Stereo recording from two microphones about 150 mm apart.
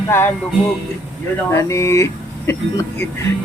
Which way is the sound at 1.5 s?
20° left (ahead or behind).